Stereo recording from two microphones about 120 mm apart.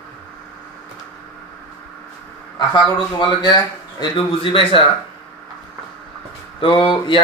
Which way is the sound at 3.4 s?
35° left (ahead or behind).